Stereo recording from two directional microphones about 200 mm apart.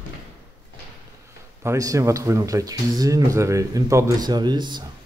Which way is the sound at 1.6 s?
15° right (ahead or behind).